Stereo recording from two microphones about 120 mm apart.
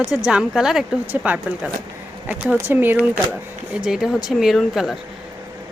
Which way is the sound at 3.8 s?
5° right (ahead or behind).